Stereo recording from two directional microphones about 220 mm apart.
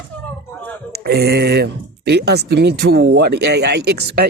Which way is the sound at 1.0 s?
45° right (ahead or behind).